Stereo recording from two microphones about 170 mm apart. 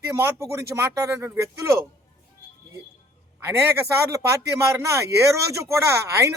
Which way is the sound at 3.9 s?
15° right (ahead or behind).